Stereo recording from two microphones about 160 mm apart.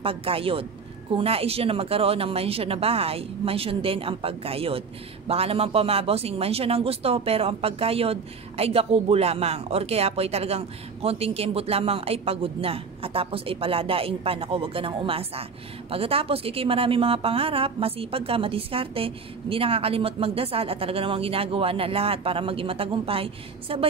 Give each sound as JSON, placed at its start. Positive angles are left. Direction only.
{"t": 0.0, "sound": "speech", "side_deg": -35}